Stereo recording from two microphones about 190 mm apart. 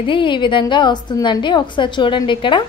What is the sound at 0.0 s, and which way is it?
A woman's voice, 25° left (ahead or behind).